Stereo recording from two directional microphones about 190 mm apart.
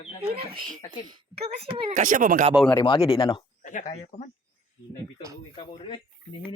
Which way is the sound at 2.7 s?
25° left (ahead or behind).